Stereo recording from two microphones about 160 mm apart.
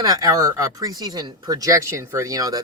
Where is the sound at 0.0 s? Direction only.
20° right (ahead or behind).